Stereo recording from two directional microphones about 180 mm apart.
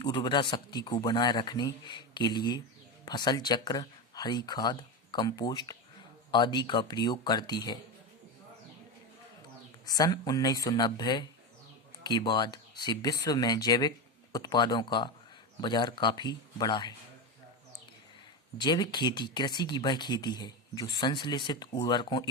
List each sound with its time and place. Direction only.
0.0 s speech: 25° left (ahead or behind)
9.8 s speech: 20° left (ahead or behind)
18.5 s speech: 25° left (ahead or behind)